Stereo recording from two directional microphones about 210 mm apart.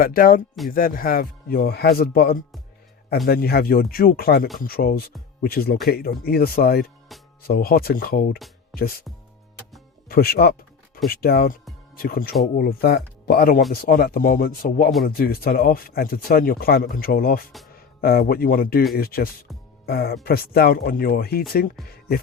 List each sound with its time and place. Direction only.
0.0 s speech: 45° left (ahead or behind)
10.1 s a man's voice: 45° left (ahead or behind)